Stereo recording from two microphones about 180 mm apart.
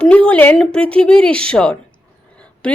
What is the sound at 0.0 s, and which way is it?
A woman's voice, 5° left (ahead or behind).